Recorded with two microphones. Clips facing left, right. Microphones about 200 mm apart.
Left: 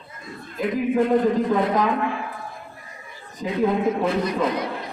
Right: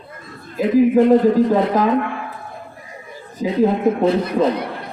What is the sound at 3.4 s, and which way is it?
Speech, 40° right (ahead or behind).